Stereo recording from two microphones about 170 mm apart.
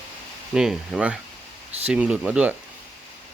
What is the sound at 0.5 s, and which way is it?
Speech, 5° right (ahead or behind).